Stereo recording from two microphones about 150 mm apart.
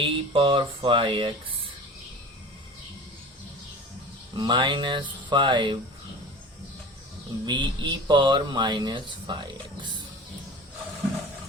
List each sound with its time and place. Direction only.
0.0 s speech: 35° right (ahead or behind)
4.4 s speech: 30° right (ahead or behind)
7.4 s speech: 30° right (ahead or behind)